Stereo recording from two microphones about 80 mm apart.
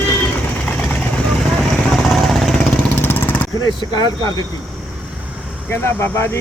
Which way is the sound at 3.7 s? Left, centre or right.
Left.